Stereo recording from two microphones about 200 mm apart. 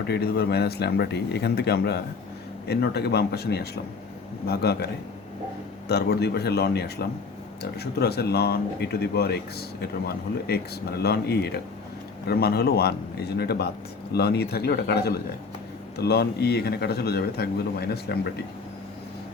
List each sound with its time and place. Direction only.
0.1 s a man's voice: 50° left (ahead or behind)
5.9 s a man's voice: 55° left (ahead or behind)